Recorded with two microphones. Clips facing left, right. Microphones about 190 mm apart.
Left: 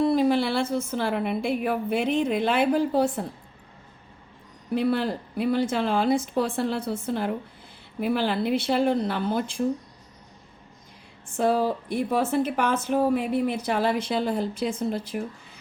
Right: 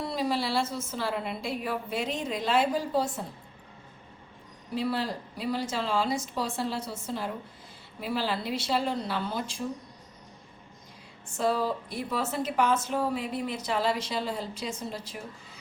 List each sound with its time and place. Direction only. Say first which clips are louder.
0.0 s a woman's voice: left 9 dB; 55° left (ahead or behind)
4.7 s speech: left 6 dB; 55° left (ahead or behind)
11.3 s speech: left 5 dB; 55° left (ahead or behind)